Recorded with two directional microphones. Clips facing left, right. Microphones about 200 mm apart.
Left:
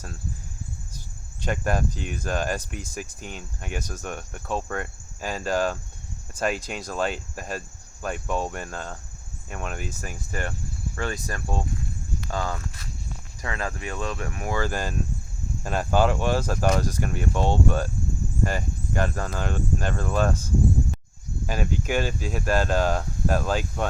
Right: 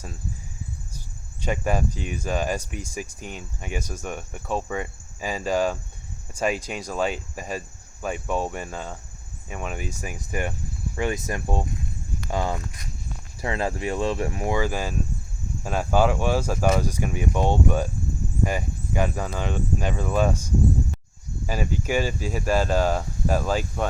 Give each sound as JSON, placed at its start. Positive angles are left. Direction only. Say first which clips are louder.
{"t": 1.5, "sound": "speech", "louder": "right 1 dB", "side_deg": -5}
{"t": 8.0, "sound": "cricket", "louder": "right 1 dB", "side_deg": -5}
{"t": 9.5, "sound": "speech", "louder": "right 1 dB", "side_deg": -5}
{"t": 13.4, "sound": "speech", "louder": "right 5 dB", "side_deg": -30}
{"t": 14.6, "sound": "speech", "louder": "right 1 dB", "side_deg": -5}
{"t": 19.4, "sound": "cricket", "louder": "right 1 dB", "side_deg": 5}
{"t": 19.8, "sound": "speech", "louder": "right 2 dB", "side_deg": -5}